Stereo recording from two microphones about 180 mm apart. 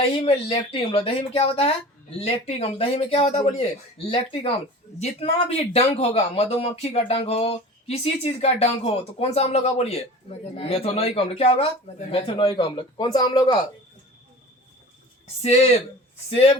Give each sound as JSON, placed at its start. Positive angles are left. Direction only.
{"t": 0.0, "sound": "speech", "side_deg": 35}